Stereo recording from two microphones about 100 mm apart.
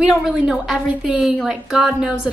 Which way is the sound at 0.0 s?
5° right (ahead or behind).